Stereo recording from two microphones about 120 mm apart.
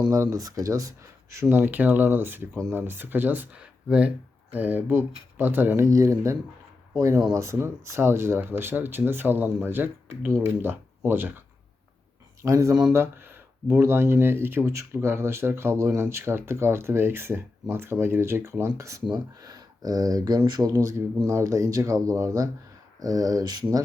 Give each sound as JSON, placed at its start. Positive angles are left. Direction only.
{"t": 0.0, "sound": "speech", "side_deg": -25}
{"t": 12.9, "sound": "speech", "side_deg": -20}